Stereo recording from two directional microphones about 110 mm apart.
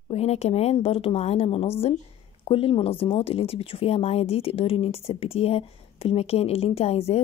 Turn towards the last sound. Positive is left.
turn(degrees=70)  # may be behind; listen again after turning